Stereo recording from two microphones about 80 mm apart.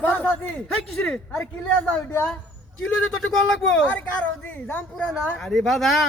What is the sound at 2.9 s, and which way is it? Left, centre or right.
Speech, centre.